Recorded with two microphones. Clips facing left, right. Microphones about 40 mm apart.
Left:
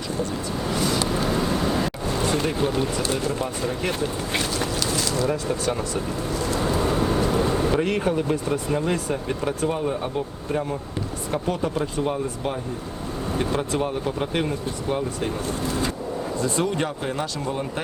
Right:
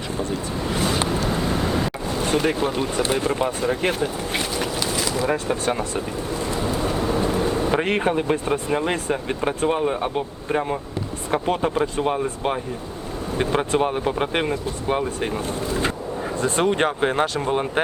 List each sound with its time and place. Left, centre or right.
0.3 s a sound: right
1.3 s vehicle: centre
2.3 s speech: right
4.3 s a sound: centre
5.3 s speech: right
7.7 s speech: right